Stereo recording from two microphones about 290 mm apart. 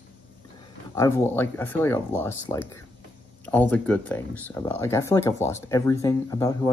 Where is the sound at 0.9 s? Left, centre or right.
Centre.